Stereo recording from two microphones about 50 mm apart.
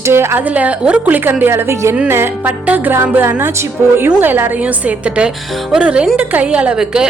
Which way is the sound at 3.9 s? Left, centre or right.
Right.